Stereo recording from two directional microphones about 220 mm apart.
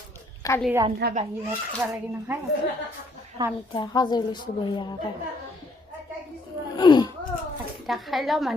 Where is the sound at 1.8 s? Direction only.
5° right (ahead or behind).